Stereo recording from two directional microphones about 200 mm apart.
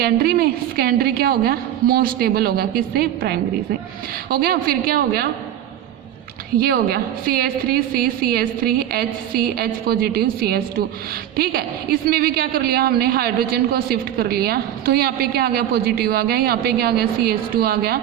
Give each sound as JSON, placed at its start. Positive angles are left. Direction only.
{"t": 0.0, "sound": "a woman's voice", "side_deg": -50}
{"t": 6.6, "sound": "a woman's voice", "side_deg": -50}